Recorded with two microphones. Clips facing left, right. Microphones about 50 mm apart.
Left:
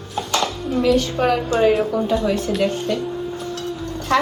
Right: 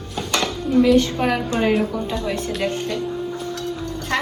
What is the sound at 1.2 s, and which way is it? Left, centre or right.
Speech, right.